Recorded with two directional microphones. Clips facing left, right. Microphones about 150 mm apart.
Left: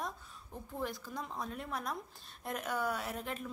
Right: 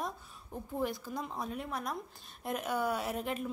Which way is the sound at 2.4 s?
15° right (ahead or behind).